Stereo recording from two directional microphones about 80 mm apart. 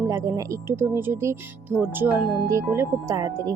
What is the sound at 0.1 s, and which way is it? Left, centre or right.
Speech, right.